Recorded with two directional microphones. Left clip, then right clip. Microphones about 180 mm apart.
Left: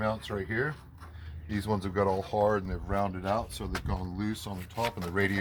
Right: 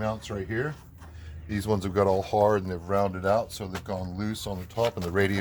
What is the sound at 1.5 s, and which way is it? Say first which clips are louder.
Speech: right 4 dB; 45° right (ahead or behind).